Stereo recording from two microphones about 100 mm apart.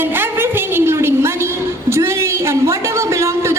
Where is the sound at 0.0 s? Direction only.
20° right (ahead or behind).